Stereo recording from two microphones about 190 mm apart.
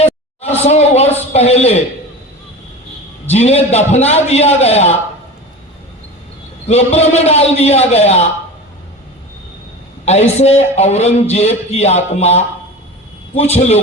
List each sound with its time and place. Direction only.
0.0 s a sound: 35° left (ahead or behind)
3.3 s a man's voice: 35° left (ahead or behind)
6.7 s a man's voice: 35° left (ahead or behind)
10.1 s a man's voice: 35° left (ahead or behind)